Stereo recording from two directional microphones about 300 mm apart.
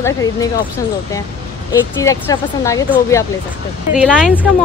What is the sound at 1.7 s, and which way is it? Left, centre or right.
Speech, centre.